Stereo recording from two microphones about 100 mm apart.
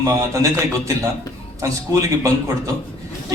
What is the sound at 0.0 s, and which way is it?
Speech, 30° right (ahead or behind).